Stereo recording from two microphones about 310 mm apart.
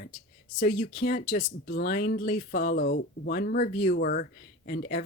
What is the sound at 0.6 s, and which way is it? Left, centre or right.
Speech, left.